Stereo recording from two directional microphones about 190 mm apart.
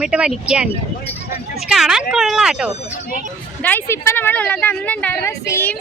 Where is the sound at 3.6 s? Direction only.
10° left (ahead or behind).